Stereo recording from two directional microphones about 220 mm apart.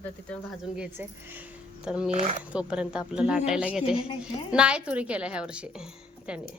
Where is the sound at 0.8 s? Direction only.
10° right (ahead or behind).